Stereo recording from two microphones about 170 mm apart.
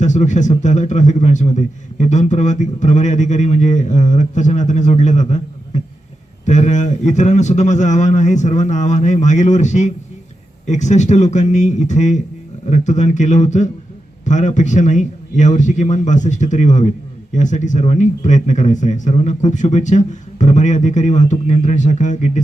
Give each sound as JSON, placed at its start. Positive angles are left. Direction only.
{"t": 0.0, "sound": "a man's voice", "side_deg": 45}